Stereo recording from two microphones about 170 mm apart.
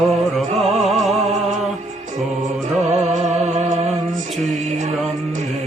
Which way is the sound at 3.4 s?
45° right (ahead or behind).